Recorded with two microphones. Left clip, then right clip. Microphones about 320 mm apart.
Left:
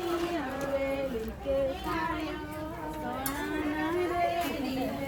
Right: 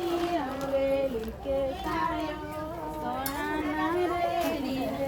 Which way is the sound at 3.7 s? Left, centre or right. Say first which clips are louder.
Right 1 dB; centre.